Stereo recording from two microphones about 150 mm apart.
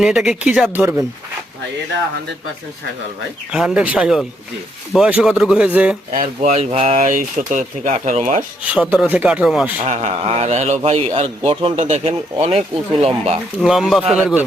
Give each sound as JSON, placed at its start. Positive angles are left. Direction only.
{"t": 0.0, "sound": "speech", "side_deg": -5}
{"t": 3.5, "sound": "speech", "side_deg": -5}
{"t": 6.1, "sound": "a man's voice", "side_deg": -55}
{"t": 6.9, "sound": "speech", "side_deg": -60}
{"t": 8.6, "sound": "speech", "side_deg": -10}
{"t": 9.8, "sound": "a man's voice", "side_deg": -45}
{"t": 13.6, "sound": "speech", "side_deg": 0}